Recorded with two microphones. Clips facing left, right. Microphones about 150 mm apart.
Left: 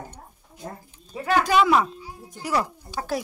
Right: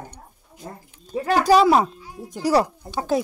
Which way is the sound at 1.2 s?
35° right (ahead or behind).